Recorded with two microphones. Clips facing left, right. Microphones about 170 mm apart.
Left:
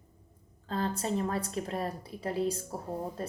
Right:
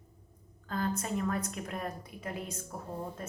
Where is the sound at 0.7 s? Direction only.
30° left (ahead or behind).